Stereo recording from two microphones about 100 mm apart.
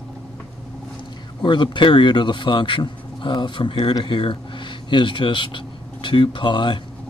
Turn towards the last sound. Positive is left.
turn(degrees=55)  # may be behind; listen again after turning